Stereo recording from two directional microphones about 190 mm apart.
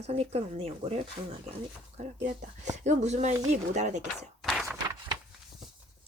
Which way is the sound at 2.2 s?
35° right (ahead or behind).